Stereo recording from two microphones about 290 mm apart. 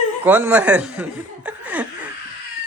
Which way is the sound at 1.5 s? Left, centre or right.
Centre.